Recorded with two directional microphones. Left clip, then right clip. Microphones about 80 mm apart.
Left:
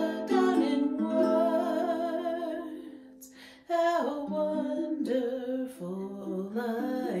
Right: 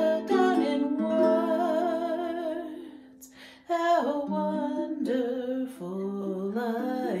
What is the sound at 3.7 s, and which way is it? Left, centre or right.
Female singing, right.